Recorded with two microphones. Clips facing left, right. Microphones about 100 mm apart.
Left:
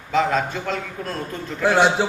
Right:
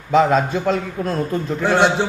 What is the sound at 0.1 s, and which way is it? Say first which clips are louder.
A man's voice: right 5 dB; 20° right (ahead or behind).